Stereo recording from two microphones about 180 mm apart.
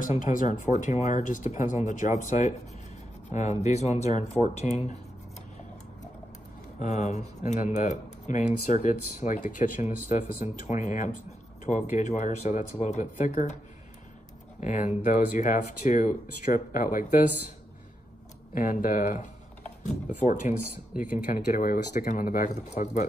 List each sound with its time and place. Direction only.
0.0 s speech: 45° left (ahead or behind)
6.8 s speech: 40° left (ahead or behind)
14.6 s speech: 45° left (ahead or behind)
18.5 s speech: 50° left (ahead or behind)